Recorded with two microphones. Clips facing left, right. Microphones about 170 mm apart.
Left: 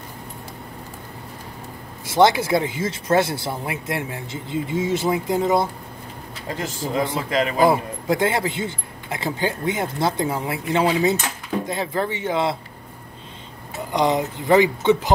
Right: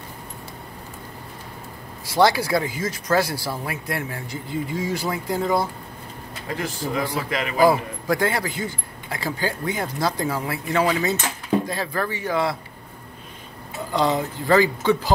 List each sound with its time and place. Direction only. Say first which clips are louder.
2.0 s a man's voice: left 2 dB; 20° left (ahead or behind)
6.9 s a man's voice: left 3 dB; 25° left (ahead or behind)
13.9 s a man's voice: left 2 dB; 20° left (ahead or behind)